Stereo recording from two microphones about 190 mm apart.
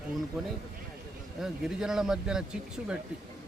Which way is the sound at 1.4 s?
5° right (ahead or behind).